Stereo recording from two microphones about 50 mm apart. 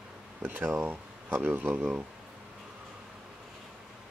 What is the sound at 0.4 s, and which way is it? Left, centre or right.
Speech, right.